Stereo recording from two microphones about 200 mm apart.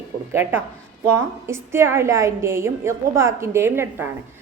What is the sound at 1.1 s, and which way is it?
A woman's voice, 15° right (ahead or behind).